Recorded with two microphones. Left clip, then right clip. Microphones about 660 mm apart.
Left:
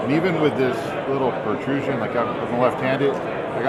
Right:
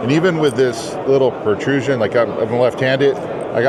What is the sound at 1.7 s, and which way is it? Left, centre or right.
Speech, right.